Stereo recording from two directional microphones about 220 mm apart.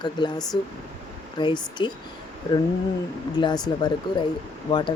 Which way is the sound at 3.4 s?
20° left (ahead or behind).